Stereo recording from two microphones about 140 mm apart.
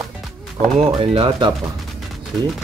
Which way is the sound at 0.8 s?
40° right (ahead or behind).